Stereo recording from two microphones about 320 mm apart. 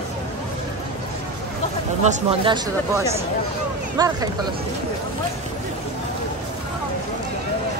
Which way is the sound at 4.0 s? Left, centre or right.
Centre.